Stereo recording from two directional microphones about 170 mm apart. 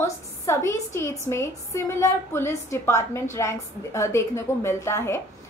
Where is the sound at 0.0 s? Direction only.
15° left (ahead or behind).